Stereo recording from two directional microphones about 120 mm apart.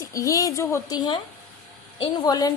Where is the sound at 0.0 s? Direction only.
25° left (ahead or behind).